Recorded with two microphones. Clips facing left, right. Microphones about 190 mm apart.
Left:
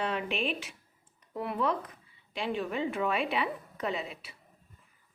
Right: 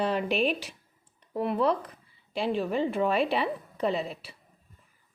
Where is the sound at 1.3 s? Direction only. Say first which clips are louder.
Right 5 dB; 25° right (ahead or behind).